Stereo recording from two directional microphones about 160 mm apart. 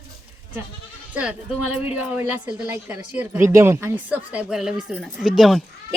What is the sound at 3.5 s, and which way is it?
Speech, 15° right (ahead or behind).